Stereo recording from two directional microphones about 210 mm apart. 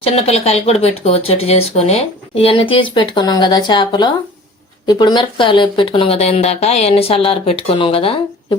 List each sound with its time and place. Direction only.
0.0 s speech: 30° left (ahead or behind)